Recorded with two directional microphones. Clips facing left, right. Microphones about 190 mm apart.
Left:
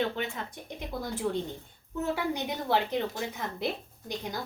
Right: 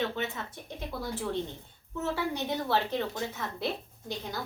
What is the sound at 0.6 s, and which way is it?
Speech, 15° left (ahead or behind).